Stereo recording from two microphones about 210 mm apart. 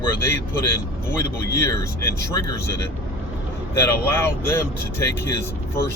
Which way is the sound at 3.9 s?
10° left (ahead or behind).